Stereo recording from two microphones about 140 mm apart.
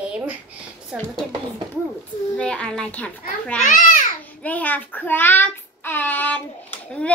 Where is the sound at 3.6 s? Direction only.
70° left (ahead or behind).